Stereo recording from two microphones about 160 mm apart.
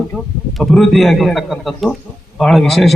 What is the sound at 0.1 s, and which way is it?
A man's voice, centre (ahead or behind).